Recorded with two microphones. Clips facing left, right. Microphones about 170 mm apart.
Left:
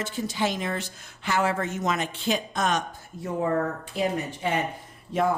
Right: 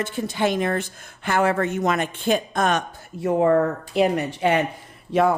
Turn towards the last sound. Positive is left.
turn(degrees=-75)  # may be behind; listen again after turning